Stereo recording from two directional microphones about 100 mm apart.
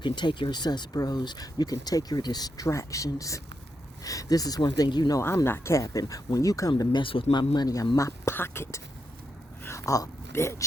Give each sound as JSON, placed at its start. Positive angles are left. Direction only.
{"t": 0.0, "sound": "speech", "side_deg": 50}
{"t": 5.2, "sound": "speech", "side_deg": 25}
{"t": 7.0, "sound": "speech", "side_deg": 60}